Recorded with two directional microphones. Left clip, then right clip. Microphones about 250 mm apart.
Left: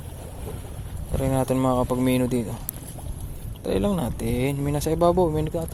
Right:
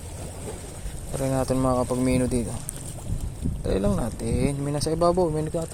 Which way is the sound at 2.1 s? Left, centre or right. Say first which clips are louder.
Left 1 dB; centre.